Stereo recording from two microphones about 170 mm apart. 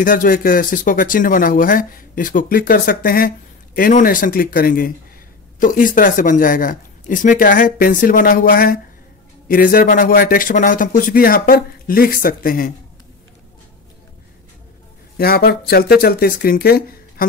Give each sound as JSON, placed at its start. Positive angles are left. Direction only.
{"t": 0.0, "sound": "speech", "side_deg": 55}
{"t": 15.1, "sound": "speech", "side_deg": 65}